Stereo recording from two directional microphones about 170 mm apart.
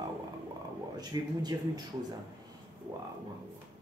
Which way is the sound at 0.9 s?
25° right (ahead or behind).